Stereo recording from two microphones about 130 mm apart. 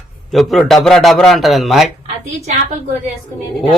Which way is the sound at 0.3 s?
Centre (ahead or behind).